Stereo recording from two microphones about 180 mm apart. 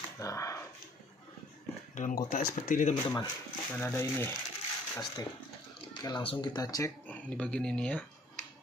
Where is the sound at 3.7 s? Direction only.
15° left (ahead or behind).